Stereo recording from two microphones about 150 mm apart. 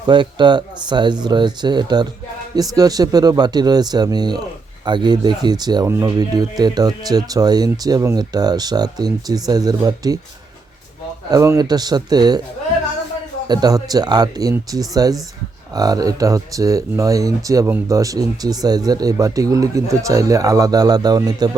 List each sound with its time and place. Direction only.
0.1 s speech: 30° right (ahead or behind)
11.3 s speech: 25° right (ahead or behind)
13.5 s speech: 25° right (ahead or behind)